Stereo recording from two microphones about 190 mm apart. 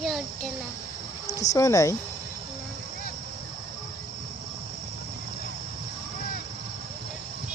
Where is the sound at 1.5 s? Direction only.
15° left (ahead or behind).